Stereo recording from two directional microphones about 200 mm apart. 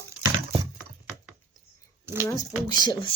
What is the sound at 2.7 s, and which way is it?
Speech, 20° left (ahead or behind).